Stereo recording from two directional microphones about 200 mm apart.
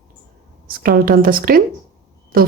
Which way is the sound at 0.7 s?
45° right (ahead or behind).